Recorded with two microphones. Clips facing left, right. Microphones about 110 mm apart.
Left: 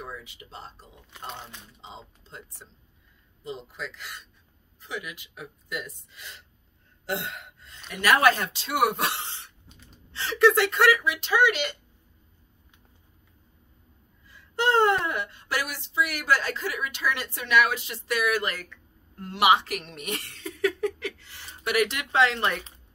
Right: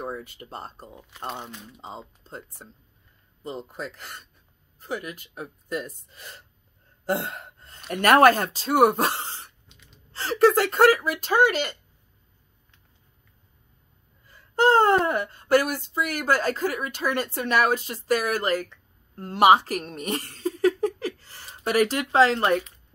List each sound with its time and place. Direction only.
0.0 s speech: 45° right (ahead or behind)
2.0 s speech: 45° right (ahead or behind)
7.1 s gasp: 45° right (ahead or behind)
7.9 s speech: 50° right (ahead or behind)
9.7 s gasp: 40° left (ahead or behind)
10.1 s speech: 40° right (ahead or behind)
14.2 s speech: 45° right (ahead or behind)